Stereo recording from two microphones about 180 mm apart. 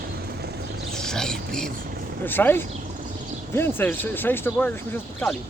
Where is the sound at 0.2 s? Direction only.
60° right (ahead or behind).